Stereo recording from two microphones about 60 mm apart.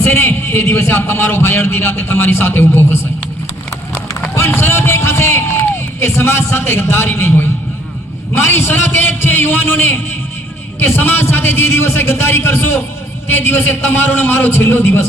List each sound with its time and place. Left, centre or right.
0.0 s a man's voice: left
4.1 s a man's voice: left